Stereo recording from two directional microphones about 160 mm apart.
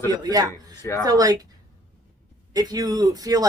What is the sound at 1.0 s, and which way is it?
Speech, 25° right (ahead or behind).